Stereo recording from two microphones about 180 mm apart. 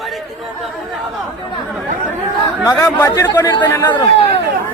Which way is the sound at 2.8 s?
15° left (ahead or behind).